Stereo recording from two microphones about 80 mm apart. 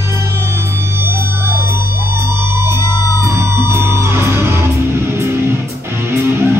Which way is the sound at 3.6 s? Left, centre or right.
Right.